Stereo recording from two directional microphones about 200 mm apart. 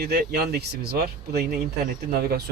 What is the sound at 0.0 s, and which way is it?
A man's voice, 50° right (ahead or behind).